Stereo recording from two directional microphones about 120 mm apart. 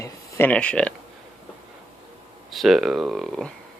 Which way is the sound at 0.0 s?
25° left (ahead or behind).